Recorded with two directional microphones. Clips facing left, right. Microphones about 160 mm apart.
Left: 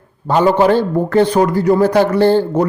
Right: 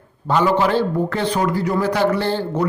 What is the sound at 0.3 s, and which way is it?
A man's voice, 45° left (ahead or behind).